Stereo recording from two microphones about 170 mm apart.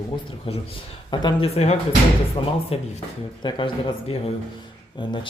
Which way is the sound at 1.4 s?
40° left (ahead or behind).